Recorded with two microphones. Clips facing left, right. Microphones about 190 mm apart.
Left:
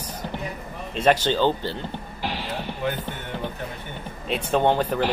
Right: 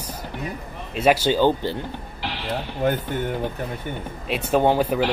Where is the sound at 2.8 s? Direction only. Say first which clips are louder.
Right 6 dB; 45° right (ahead or behind).